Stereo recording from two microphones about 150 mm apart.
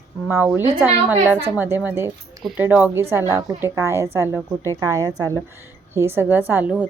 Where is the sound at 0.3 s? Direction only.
15° right (ahead or behind).